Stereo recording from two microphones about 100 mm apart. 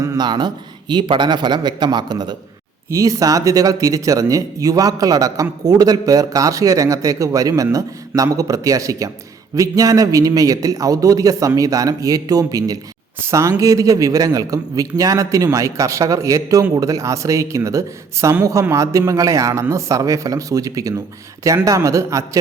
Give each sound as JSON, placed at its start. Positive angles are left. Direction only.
{"t": 0.2, "sound": "a man's voice", "side_deg": -45}
{"t": 2.9, "sound": "speech", "side_deg": -35}